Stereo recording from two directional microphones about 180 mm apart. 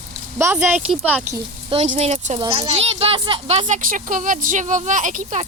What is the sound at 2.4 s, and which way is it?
Speech, 25° right (ahead or behind).